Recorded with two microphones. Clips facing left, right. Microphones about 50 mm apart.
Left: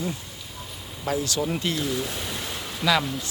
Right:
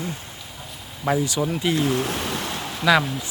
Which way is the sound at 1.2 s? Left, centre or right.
Centre.